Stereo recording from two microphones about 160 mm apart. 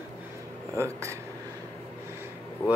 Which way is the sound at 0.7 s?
15° right (ahead or behind).